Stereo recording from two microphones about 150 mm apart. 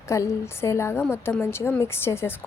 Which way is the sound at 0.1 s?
20° left (ahead or behind).